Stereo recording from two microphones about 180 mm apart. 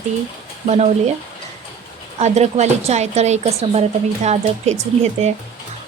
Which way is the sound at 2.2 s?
40° right (ahead or behind).